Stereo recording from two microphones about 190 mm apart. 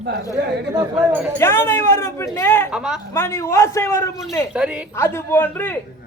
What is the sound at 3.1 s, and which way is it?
A man's voice, 15° left (ahead or behind).